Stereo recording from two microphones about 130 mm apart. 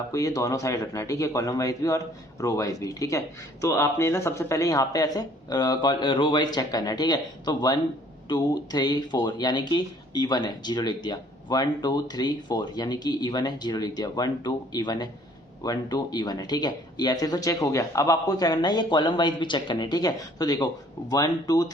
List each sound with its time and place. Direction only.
0.1 s speech: 25° left (ahead or behind)